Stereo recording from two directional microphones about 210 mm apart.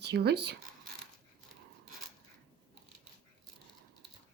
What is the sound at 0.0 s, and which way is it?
Speech, 50° right (ahead or behind).